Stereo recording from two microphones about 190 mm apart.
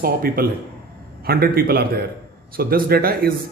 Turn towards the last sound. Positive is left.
turn(degrees=-55)  # may be behind; listen again after turning